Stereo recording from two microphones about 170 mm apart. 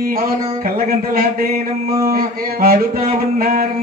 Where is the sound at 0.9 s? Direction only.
55° right (ahead or behind).